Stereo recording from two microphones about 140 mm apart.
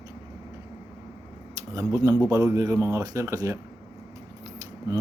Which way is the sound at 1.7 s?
25° right (ahead or behind).